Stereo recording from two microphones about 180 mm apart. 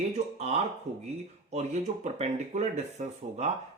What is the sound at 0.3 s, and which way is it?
Speech, 35° right (ahead or behind).